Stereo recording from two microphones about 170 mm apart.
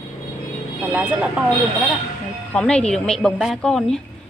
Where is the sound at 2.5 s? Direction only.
5° left (ahead or behind).